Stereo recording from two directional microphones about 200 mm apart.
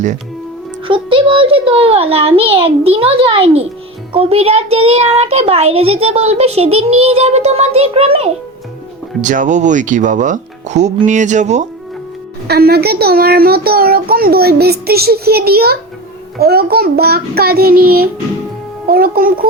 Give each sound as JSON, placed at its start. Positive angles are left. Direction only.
{"t": 0.9, "sound": "a child's voice", "side_deg": -25}
{"t": 12.5, "sound": "a child's voice", "side_deg": -50}